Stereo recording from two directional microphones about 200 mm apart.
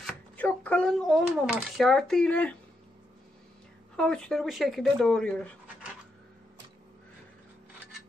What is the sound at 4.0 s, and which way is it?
Speech, 5° left (ahead or behind).